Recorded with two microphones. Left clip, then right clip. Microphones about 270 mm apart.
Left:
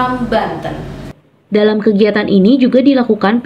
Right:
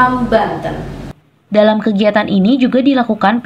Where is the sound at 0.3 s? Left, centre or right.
Centre.